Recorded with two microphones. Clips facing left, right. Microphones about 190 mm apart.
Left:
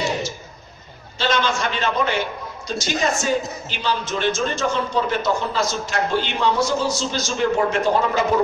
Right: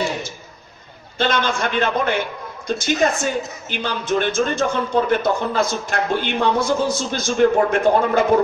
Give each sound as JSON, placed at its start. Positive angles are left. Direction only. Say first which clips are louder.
{"t": 1.1, "sound": "a man's voice", "louder": "right 1 dB", "side_deg": -55}